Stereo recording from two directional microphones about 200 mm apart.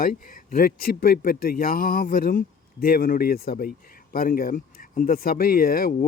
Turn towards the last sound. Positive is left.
turn(degrees=45)  # may be behind; listen again after turning